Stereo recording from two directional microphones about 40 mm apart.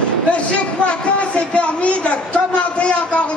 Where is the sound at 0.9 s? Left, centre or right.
Left.